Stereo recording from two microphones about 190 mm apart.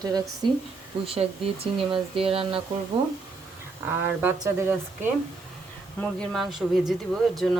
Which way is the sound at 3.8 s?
10° right (ahead or behind).